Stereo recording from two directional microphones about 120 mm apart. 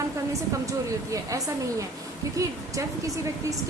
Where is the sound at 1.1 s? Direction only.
25° right (ahead or behind).